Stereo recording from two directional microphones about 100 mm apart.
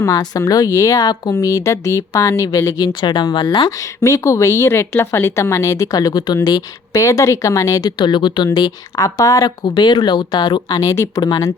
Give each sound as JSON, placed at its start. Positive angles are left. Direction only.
{"t": 0.0, "sound": "speech", "side_deg": 35}
{"t": 3.7, "sound": "speech", "side_deg": 30}